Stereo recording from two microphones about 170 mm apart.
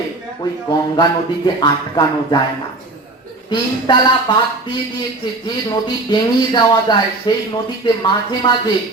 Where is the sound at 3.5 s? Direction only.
25° left (ahead or behind).